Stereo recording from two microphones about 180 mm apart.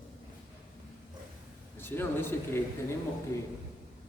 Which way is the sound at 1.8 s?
10° left (ahead or behind).